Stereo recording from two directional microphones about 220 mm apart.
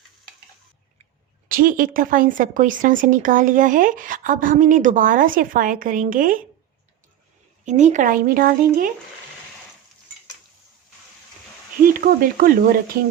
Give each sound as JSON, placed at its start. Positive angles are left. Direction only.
{"t": 1.5, "sound": "speech", "side_deg": -40}
{"t": 7.6, "sound": "speech", "side_deg": -35}
{"t": 11.8, "sound": "speech", "side_deg": -40}